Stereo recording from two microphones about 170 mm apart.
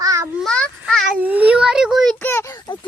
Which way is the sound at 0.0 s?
15° right (ahead or behind).